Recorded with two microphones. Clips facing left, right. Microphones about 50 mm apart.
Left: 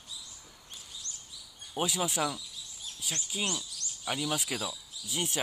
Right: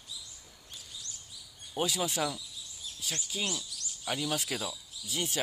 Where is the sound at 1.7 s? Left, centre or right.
Centre.